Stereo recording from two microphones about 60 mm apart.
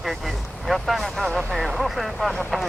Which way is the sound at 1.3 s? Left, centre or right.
Centre.